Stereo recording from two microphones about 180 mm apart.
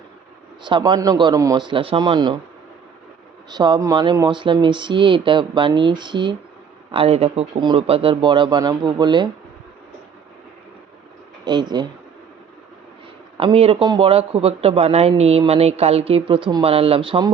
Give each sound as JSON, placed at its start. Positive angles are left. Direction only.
{"t": 0.6, "sound": "speech", "side_deg": -25}
{"t": 3.5, "sound": "speech", "side_deg": -25}
{"t": 11.4, "sound": "speech", "side_deg": -25}
{"t": 13.3, "sound": "speech", "side_deg": -30}